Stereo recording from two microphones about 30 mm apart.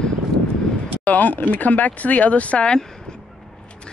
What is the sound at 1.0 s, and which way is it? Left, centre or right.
Speech, left.